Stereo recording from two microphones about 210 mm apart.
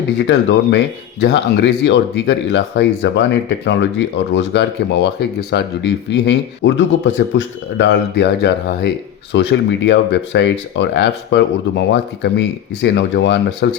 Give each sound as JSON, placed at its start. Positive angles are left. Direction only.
{"t": 0.2, "sound": "speech", "side_deg": 55}